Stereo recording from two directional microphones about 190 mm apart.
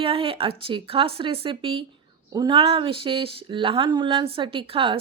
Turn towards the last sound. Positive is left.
turn(degrees=-30)  # may be behind; listen again after turning